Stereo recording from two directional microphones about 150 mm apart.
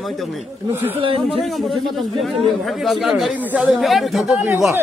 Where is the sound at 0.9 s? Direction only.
35° right (ahead or behind).